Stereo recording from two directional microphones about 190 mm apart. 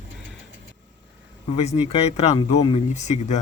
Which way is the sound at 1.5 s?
30° left (ahead or behind).